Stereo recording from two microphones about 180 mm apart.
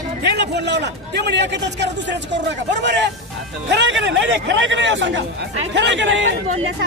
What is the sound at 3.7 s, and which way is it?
A man's voice, 85° right.